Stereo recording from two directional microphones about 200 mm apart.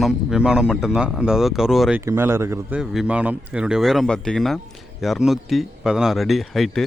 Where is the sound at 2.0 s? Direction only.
10° right (ahead or behind).